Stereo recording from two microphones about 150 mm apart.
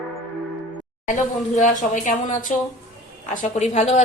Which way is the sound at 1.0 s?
55° left (ahead or behind).